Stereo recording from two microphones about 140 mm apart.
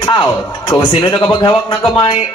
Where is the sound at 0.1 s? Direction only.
35° left (ahead or behind).